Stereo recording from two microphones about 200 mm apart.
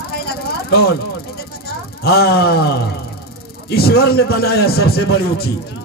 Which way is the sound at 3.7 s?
50° left (ahead or behind).